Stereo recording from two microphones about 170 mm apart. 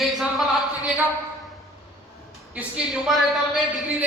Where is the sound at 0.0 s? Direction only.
Centre (ahead or behind).